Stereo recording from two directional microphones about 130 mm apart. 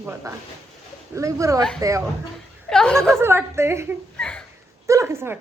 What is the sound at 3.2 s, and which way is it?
Speech, 20° right (ahead or behind).